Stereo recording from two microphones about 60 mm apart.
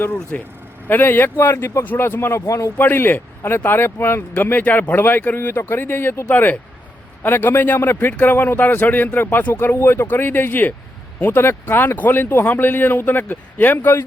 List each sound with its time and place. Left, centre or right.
0.3 s speech: left
0.9 s speech: left
2.5 s speech: left
2.7 s speech: left